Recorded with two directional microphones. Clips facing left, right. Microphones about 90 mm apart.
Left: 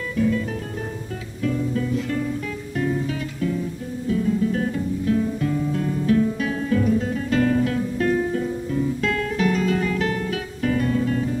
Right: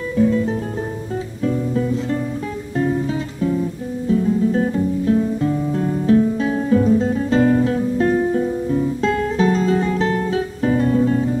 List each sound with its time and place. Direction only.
0.1 s music: 30° right (ahead or behind)
2.8 s guitar: 30° right (ahead or behind)